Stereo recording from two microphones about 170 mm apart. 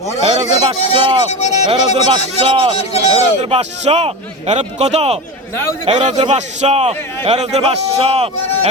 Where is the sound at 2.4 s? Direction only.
30° right (ahead or behind).